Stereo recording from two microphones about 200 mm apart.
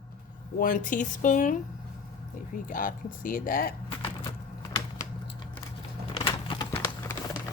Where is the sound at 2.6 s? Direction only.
45° left (ahead or behind).